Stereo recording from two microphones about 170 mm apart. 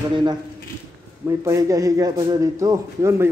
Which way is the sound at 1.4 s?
20° right (ahead or behind).